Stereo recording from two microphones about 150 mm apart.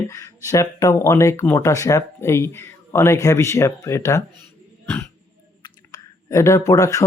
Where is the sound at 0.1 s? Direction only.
20° left (ahead or behind).